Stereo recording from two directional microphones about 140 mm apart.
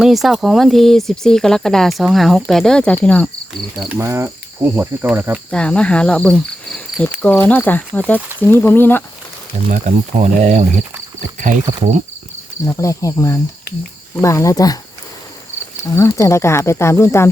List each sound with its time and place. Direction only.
0.0 s speech: centre (ahead or behind)
3.8 s cricket: 10° right (ahead or behind)
4.0 s cricket: 20° right (ahead or behind)
5.5 s speech: 10° left (ahead or behind)
9.6 s speech: 55° right (ahead or behind)
12.6 s speech: 20° left (ahead or behind)
16.0 s speech: 20° left (ahead or behind)